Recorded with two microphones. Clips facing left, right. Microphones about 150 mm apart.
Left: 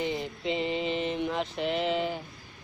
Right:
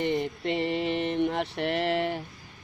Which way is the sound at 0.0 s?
5° left (ahead or behind).